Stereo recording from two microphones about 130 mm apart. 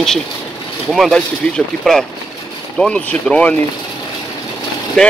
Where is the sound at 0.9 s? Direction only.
Centre (ahead or behind).